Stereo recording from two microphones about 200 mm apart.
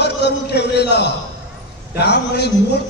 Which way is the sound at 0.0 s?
55° left (ahead or behind).